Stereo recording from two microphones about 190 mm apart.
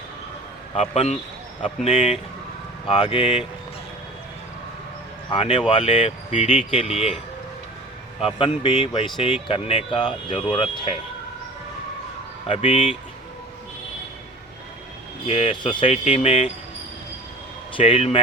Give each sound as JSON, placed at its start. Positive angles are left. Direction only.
{"t": 0.8, "sound": "speech", "side_deg": 35}
{"t": 5.3, "sound": "speech", "side_deg": 25}
{"t": 8.2, "sound": "speech", "side_deg": 25}
{"t": 12.5, "sound": "speech", "side_deg": 30}
{"t": 15.3, "sound": "speech", "side_deg": 30}
{"t": 17.7, "sound": "speech", "side_deg": 30}